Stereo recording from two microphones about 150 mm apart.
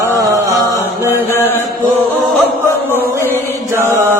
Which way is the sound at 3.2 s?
15° right (ahead or behind).